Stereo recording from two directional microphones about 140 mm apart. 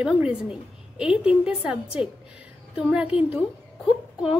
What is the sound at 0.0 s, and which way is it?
A woman's voice, 5° right (ahead or behind).